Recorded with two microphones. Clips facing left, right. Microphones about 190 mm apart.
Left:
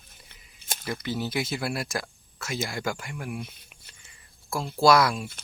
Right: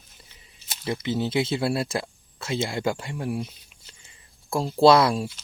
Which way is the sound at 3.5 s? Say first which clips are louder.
Right 1 dB; 55° left (ahead or behind).